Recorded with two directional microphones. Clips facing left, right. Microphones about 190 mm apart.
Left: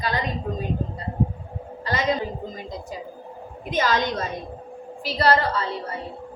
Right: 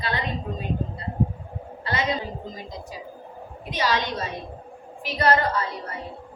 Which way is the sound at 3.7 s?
50° left (ahead or behind).